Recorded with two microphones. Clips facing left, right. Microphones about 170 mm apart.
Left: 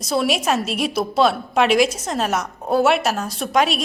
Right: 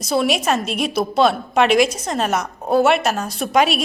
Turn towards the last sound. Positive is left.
turn(degrees=-5)  # may be behind; listen again after turning